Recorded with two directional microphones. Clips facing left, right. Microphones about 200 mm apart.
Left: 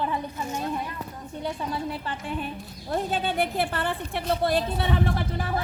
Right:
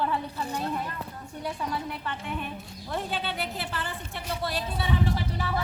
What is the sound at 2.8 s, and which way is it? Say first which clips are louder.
A woman's voice: left 5 dB; 40° left (ahead or behind).